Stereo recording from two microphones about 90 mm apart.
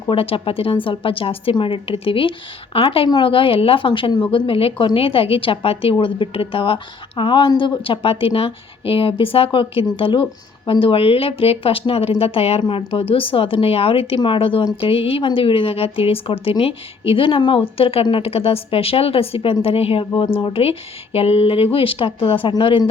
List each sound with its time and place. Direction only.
0.1 s speech: 80° left
7.2 s speech: 65° left (ahead or behind)